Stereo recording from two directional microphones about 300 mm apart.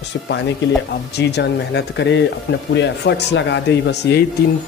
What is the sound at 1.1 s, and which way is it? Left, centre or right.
Speech, left.